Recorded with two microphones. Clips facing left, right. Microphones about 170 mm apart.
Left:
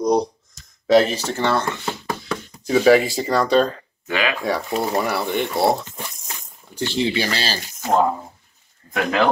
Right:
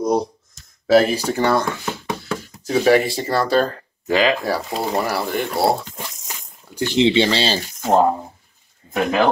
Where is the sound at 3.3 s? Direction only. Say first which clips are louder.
Left 1 dB; 5° right (ahead or behind).